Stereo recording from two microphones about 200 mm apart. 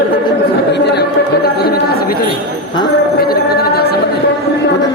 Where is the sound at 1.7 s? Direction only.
50° left (ahead or behind).